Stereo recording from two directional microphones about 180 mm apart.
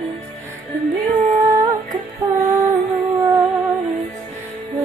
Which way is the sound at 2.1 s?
20° right (ahead or behind).